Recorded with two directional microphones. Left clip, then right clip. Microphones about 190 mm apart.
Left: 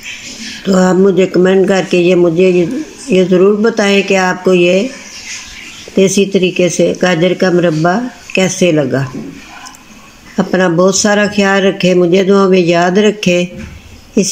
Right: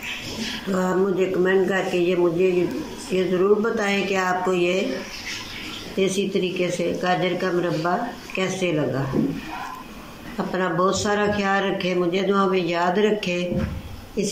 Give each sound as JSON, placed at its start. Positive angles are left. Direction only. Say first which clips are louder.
{"t": 0.7, "sound": "speech", "louder": "left 13 dB", "side_deg": 55}
{"t": 5.9, "sound": "speech", "louder": "left 12 dB", "side_deg": 45}
{"t": 10.3, "sound": "speech", "louder": "left 12 dB", "side_deg": 50}